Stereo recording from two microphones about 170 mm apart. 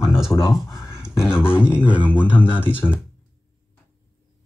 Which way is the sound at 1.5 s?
5° right (ahead or behind).